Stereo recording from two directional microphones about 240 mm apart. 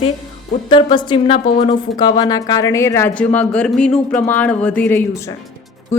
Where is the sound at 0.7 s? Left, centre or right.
Centre.